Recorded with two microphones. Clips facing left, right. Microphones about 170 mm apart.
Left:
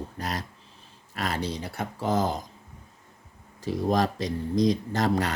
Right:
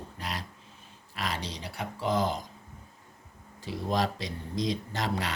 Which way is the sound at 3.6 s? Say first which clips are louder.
Left 5 dB; 45° left (ahead or behind).